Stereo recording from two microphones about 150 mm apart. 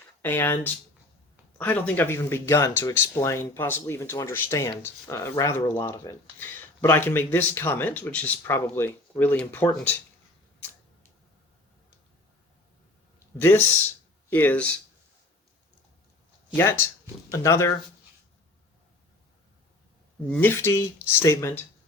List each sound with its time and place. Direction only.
0.2 s speech: 15° left (ahead or behind)
13.4 s speech: 15° left (ahead or behind)
16.6 s speech: 15° left (ahead or behind)
20.3 s speech: 15° left (ahead or behind)